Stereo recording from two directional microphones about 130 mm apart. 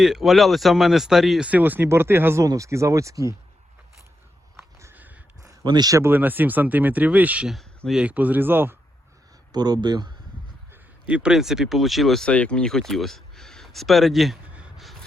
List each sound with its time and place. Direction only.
0.0 s speech: centre (ahead or behind); by 3.3 s 25° right (ahead or behind)
4.5 s a sound: 20° right (ahead or behind)
5.4 s speech: 30° right (ahead or behind)
9.5 s speech: 30° right (ahead or behind)
11.0 s speech: 10° right (ahead or behind)